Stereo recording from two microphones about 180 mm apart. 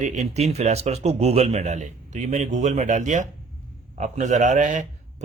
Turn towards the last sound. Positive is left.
turn(degrees=-45)  # may be behind; listen again after turning